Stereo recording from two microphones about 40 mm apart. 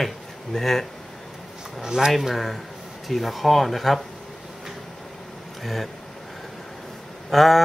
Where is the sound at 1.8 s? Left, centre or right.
Centre.